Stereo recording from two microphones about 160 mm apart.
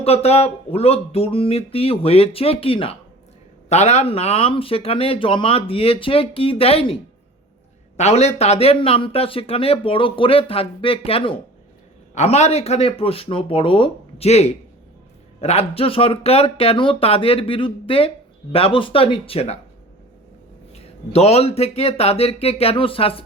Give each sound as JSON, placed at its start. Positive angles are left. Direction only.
{"t": 0.0, "sound": "a man's voice", "side_deg": 40}
{"t": 7.9, "sound": "a man's voice", "side_deg": 45}
{"t": 20.7, "sound": "a man's voice", "side_deg": 40}